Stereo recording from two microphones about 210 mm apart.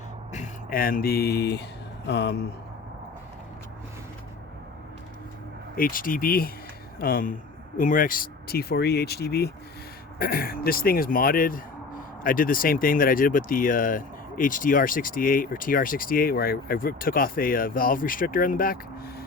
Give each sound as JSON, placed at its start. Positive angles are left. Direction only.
{"t": 0.3, "sound": "speech", "side_deg": 45}
{"t": 5.7, "sound": "speech", "side_deg": 40}